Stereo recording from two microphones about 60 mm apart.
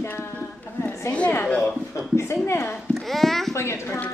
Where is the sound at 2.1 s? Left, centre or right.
Left.